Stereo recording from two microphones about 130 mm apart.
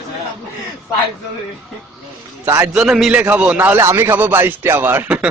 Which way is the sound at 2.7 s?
5° right (ahead or behind).